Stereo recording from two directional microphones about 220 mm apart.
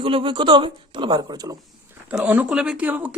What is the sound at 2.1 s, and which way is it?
Speech, 5° right (ahead or behind).